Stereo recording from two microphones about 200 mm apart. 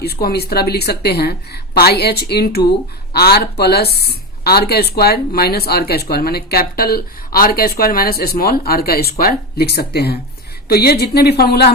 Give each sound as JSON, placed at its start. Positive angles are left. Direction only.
{"t": 0.0, "sound": "speech", "side_deg": 50}